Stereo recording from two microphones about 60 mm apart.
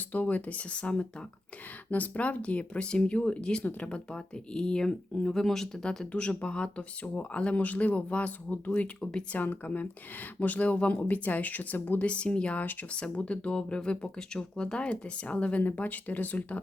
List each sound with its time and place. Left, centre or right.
0.1 s speech: left; by 6.1 s centre
6.1 s speech: centre